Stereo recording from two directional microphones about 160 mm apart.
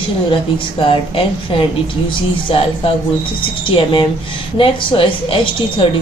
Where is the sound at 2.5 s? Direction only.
35° left (ahead or behind).